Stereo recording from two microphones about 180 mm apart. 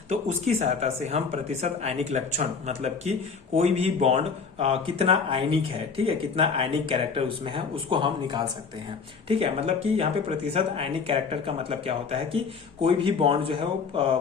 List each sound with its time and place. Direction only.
0.1 s speech: 40° right (ahead or behind)